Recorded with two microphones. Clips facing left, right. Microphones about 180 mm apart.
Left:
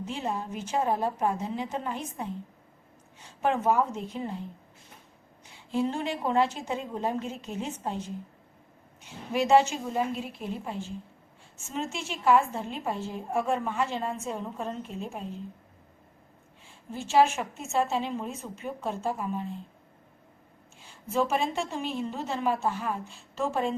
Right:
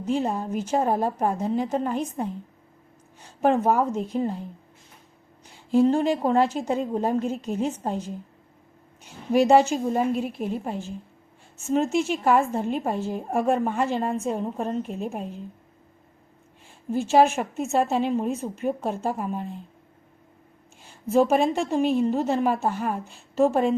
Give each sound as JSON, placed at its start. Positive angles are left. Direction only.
{"t": 0.0, "sound": "a woman's voice", "side_deg": -45}
{"t": 5.7, "sound": "a woman's voice", "side_deg": -40}
{"t": 9.3, "sound": "a woman's voice", "side_deg": -40}
{"t": 16.9, "sound": "a woman's voice", "side_deg": -50}
{"t": 21.1, "sound": "a woman's voice", "side_deg": -50}